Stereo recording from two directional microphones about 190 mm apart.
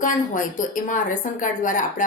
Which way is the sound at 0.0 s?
45° left (ahead or behind).